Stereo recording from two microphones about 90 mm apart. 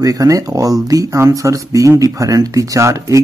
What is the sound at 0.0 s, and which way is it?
Speech, 40° right (ahead or behind).